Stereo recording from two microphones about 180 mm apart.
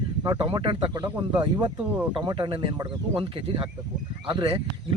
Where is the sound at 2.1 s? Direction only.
25° right (ahead or behind).